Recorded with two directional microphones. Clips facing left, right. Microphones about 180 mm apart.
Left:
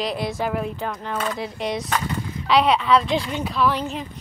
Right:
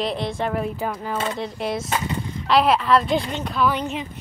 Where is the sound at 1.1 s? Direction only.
30° right (ahead or behind).